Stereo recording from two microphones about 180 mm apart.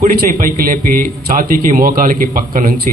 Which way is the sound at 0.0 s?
55° right (ahead or behind).